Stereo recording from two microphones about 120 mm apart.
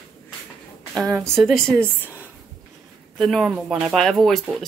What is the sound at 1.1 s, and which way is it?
Speech, centre (ahead or behind).